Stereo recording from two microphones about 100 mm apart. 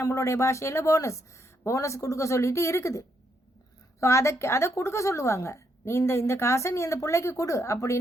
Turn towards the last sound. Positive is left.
turn(degrees=30)  # may be behind; listen again after turning